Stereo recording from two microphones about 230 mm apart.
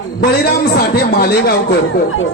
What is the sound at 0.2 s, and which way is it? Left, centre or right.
A man's voice, left.